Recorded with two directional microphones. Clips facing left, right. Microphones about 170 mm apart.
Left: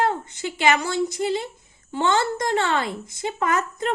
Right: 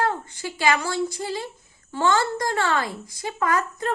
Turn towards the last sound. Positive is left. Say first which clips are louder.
# even
turn(degrees=25)  # may be behind; listen again after turning